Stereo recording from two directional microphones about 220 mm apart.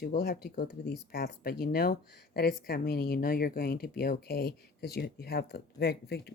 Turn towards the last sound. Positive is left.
turn(degrees=50)  # may be behind; listen again after turning